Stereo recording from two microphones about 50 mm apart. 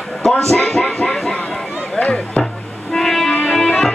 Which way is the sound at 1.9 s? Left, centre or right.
Left.